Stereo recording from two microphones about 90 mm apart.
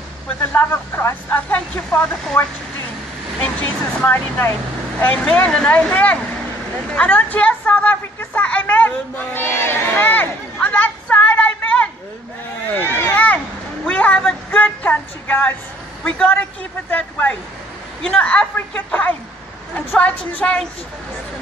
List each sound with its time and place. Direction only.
0.4 s speech: 25° left (ahead or behind)
4.1 s speech: 25° left (ahead or behind)
5.0 s a woman's voice: 15° left (ahead or behind)
12.7 s a sound: 25° left (ahead or behind)
13.8 s a woman's voice: 15° left (ahead or behind)